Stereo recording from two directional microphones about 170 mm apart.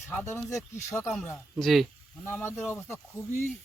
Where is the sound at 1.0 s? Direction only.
Centre (ahead or behind).